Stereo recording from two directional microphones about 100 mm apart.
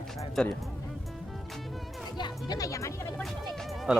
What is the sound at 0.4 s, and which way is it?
Speech, 5° left (ahead or behind).